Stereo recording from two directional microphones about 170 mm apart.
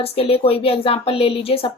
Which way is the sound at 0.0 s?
35° left (ahead or behind).